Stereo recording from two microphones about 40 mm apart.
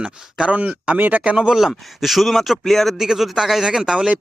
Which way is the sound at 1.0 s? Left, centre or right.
Right.